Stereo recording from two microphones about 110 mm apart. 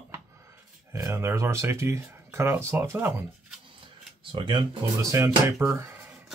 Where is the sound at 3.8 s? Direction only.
50° right (ahead or behind).